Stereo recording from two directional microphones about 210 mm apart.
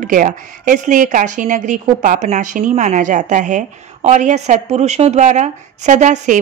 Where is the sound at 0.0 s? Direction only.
40° right (ahead or behind).